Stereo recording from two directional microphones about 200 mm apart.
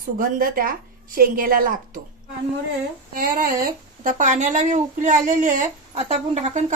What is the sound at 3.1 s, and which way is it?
Speech, 45° right (ahead or behind).